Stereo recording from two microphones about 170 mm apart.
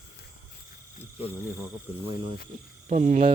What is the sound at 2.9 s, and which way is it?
Speech, 45° right (ahead or behind).